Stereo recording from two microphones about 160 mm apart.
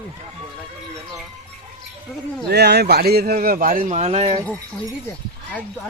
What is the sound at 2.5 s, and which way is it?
A man's voice, 90° right.